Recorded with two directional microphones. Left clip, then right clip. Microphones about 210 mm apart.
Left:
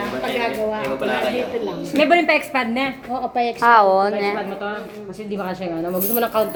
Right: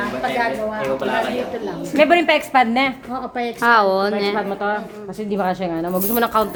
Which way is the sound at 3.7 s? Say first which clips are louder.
Left 1 dB; 40° right (ahead or behind).